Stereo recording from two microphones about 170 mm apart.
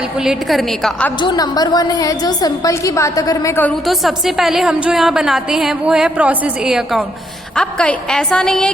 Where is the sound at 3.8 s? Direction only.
Centre (ahead or behind).